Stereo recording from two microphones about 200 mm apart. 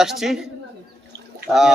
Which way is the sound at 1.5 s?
Centre (ahead or behind).